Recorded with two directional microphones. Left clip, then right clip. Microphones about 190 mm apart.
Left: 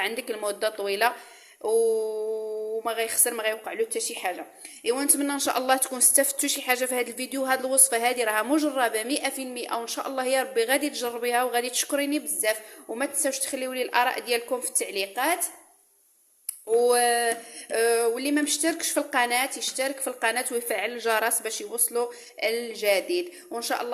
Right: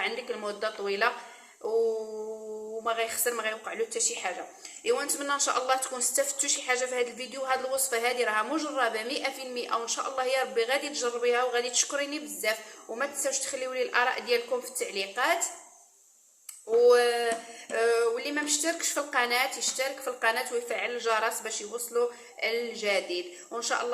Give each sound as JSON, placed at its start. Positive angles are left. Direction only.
{"t": 0.0, "sound": "a woman's voice", "side_deg": 45}
{"t": 2.8, "sound": "a woman's voice", "side_deg": 45}
{"t": 16.8, "sound": "a woman's voice", "side_deg": 45}